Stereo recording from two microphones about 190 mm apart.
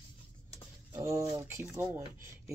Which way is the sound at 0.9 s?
15° right (ahead or behind).